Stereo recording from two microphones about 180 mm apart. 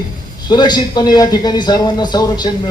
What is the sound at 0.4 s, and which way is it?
Speech, 25° left (ahead or behind).